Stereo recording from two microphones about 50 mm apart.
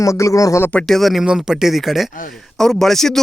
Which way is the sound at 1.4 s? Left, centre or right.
Centre.